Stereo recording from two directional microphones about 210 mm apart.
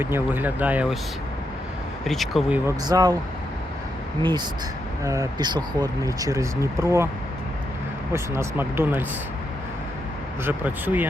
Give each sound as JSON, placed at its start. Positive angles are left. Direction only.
{"t": 0.0, "sound": "speech", "side_deg": -10}
{"t": 2.0, "sound": "speech", "side_deg": 0}
{"t": 2.6, "sound": "speech", "side_deg": -15}
{"t": 4.2, "sound": "speech", "side_deg": -20}
{"t": 8.1, "sound": "speech", "side_deg": -10}
{"t": 10.4, "sound": "speech", "side_deg": -10}